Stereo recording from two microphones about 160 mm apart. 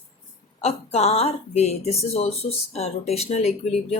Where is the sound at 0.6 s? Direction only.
40° left (ahead or behind).